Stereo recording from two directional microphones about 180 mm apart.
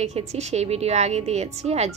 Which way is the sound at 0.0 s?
35° right (ahead or behind).